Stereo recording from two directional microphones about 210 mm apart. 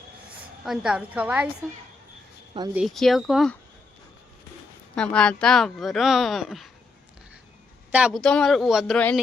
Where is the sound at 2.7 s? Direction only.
Centre (ahead or behind).